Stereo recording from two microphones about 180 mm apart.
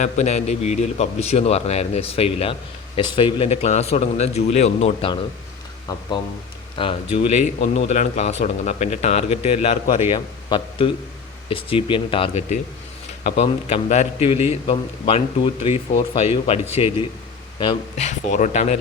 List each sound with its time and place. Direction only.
0.0 s a man's voice: 40° left (ahead or behind)
6.7 s a man's voice: 30° left (ahead or behind)